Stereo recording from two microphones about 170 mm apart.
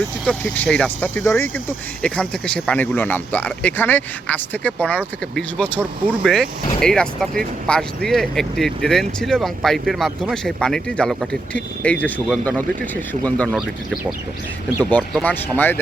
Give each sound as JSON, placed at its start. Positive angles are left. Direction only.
{"t": 0.3, "sound": "speech", "side_deg": 5}
{"t": 13.5, "sound": "speech", "side_deg": -5}
{"t": 14.8, "sound": "speech", "side_deg": 10}